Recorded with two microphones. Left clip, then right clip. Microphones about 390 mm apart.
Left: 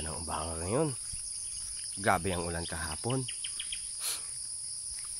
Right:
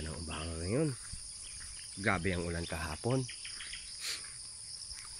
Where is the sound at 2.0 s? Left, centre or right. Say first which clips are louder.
Left 4 dB; centre.